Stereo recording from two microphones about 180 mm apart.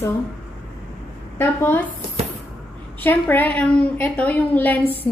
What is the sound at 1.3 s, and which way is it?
Speech, 10° left (ahead or behind).